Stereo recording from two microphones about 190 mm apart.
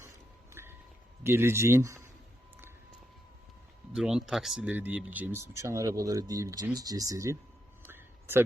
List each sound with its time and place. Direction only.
0.5 s wind chime: 10° right (ahead or behind)
1.2 s speech: 10° right (ahead or behind)
3.9 s speech: 5° right (ahead or behind)
7.8 s a sound: 10° right (ahead or behind)